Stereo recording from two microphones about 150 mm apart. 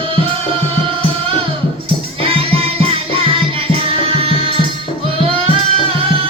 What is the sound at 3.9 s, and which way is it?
Tabla, 40° right (ahead or behind).